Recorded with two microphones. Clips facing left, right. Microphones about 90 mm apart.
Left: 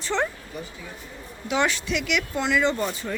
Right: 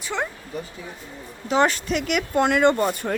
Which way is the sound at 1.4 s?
40° right (ahead or behind).